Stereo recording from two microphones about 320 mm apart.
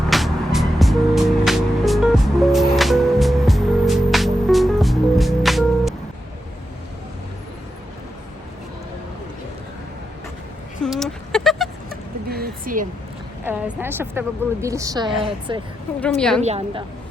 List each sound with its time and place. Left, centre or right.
0.1 s music: centre
10.8 s a sound: centre
11.9 s a sound: right
13.4 s a woman's voice: centre
16.0 s a woman's voice: centre
16.4 s a woman's voice: centre